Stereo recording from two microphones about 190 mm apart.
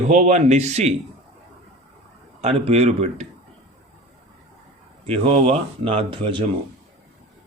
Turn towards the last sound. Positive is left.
turn(degrees=-25)  # may be behind; listen again after turning